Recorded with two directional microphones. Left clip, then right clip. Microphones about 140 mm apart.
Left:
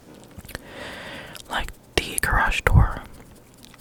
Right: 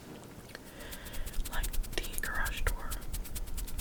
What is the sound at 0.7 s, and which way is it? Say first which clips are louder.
Whispering: left 13 dB; 50° left (ahead or behind).